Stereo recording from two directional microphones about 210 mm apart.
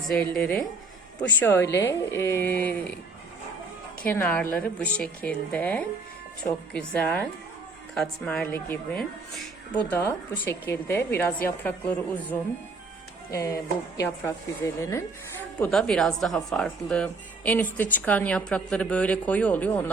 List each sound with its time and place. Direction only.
0.1 s a woman's voice: 5° left (ahead or behind)
4.0 s a woman's voice: 10° left (ahead or behind)
15.6 s speech: 5° left (ahead or behind)